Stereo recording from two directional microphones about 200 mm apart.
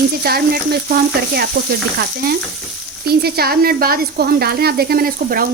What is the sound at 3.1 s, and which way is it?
Speech, 50° right (ahead or behind).